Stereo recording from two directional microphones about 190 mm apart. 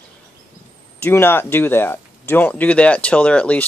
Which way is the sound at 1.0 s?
10° left (ahead or behind).